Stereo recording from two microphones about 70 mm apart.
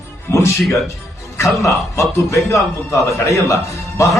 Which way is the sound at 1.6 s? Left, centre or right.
Left.